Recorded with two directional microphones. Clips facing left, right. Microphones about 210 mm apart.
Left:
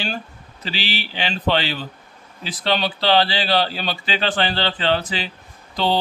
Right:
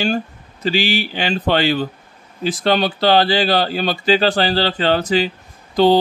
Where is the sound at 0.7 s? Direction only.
45° right (ahead or behind).